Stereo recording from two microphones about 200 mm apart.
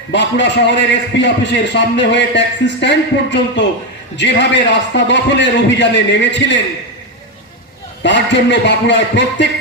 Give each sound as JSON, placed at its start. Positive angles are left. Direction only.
{"t": 0.1, "sound": "a man's voice", "side_deg": 60}
{"t": 8.0, "sound": "a man's voice", "side_deg": 60}